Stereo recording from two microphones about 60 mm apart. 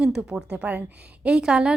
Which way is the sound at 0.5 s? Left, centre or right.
Right.